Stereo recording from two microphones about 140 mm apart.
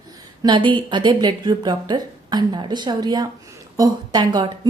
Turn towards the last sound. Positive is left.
turn(degrees=-30)  # may be behind; listen again after turning